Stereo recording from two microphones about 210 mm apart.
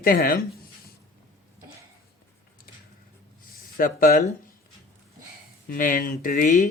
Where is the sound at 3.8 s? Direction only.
40° left (ahead or behind).